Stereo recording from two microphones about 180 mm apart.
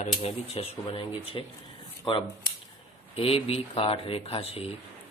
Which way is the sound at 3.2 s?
30° left (ahead or behind).